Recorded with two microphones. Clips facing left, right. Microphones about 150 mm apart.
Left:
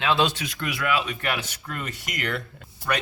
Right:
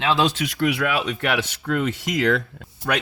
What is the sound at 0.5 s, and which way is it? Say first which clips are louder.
Speech: right 4 dB; 60° right (ahead or behind).